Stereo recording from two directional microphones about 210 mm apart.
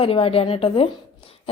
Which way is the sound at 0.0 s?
25° left (ahead or behind).